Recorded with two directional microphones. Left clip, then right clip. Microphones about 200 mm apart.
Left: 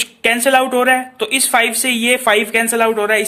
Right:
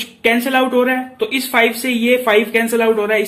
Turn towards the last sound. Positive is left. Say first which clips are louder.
# even
turn(degrees=40)  # may be behind; listen again after turning